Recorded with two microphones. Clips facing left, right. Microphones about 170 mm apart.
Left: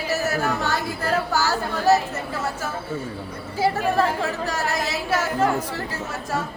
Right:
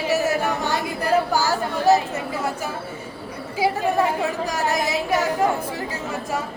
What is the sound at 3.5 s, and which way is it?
Speech, 15° right (ahead or behind).